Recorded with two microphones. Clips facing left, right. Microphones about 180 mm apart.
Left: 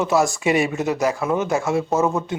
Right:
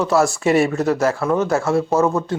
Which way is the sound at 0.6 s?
15° left (ahead or behind).